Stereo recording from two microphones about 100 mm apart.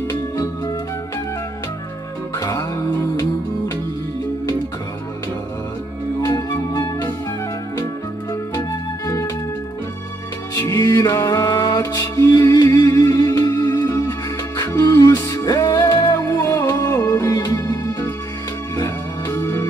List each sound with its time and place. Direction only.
0.1 s music: 40° left (ahead or behind)
2.3 s music: 30° left (ahead or behind)
6.2 s music: 35° left (ahead or behind)
8.3 s music: 30° left (ahead or behind)
10.6 s music: 30° left (ahead or behind)
15.8 s music: 25° left (ahead or behind)